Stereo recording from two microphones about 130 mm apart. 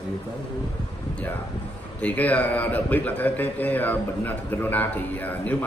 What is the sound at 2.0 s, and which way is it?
A man's voice, 10° left (ahead or behind).